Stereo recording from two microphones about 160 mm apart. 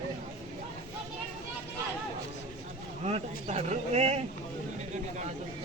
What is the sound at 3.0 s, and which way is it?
Speech, 40° right (ahead or behind).